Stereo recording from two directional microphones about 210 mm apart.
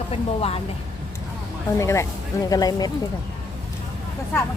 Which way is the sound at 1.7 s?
15° left (ahead or behind).